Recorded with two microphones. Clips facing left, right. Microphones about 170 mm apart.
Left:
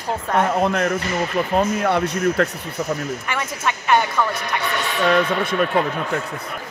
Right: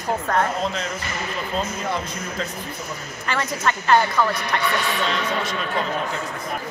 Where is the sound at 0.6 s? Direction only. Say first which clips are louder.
Left 7 dB; 60° left (ahead or behind).